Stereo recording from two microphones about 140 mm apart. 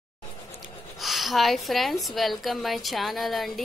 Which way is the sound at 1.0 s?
Centre (ahead or behind).